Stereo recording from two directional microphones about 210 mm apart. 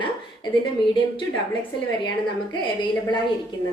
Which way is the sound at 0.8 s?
25° left (ahead or behind).